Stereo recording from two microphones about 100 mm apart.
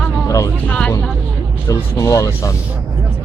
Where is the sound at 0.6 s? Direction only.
10° left (ahead or behind).